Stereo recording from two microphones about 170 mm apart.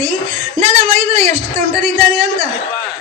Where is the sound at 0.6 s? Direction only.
40° right (ahead or behind).